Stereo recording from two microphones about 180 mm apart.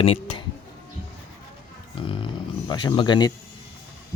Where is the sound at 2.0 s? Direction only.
30° left (ahead or behind).